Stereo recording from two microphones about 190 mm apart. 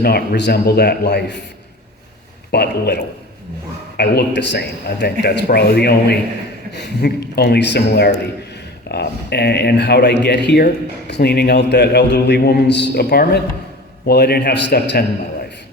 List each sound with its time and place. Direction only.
0.0 s a man's voice: 55° left (ahead or behind)
2.5 s a man's voice: 60° left (ahead or behind)